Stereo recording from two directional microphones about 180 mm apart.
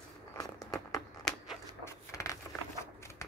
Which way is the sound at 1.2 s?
Centre (ahead or behind).